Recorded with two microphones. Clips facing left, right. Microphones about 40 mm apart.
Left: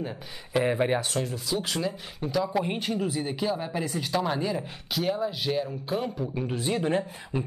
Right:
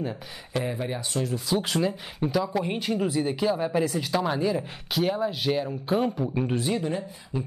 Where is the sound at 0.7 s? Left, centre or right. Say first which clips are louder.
Left 6 dB; left.